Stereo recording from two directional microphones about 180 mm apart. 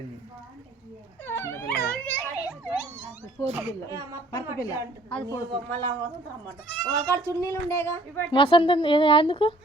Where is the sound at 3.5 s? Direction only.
15° right (ahead or behind).